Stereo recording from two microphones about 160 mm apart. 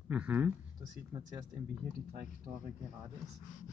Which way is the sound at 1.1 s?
25° right (ahead or behind).